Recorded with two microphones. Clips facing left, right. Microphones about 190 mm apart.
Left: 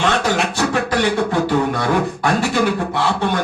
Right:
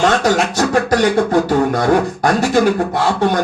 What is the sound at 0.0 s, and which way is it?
Beatboxing, 40° right (ahead or behind).